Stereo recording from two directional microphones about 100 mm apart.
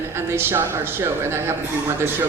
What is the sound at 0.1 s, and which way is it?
Speech, 25° right (ahead or behind).